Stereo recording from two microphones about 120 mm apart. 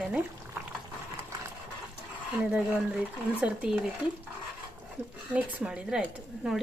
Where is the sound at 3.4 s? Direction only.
10° right (ahead or behind).